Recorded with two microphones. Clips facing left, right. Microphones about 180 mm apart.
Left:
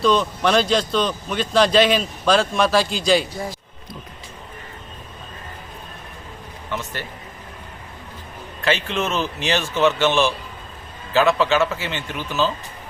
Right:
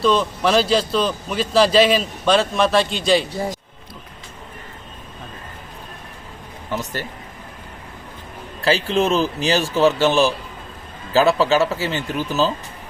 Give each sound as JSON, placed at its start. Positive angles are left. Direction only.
{"t": 0.0, "sound": "a man's voice", "side_deg": 0}
{"t": 6.7, "sound": "speech", "side_deg": -40}
{"t": 8.6, "sound": "speech", "side_deg": -35}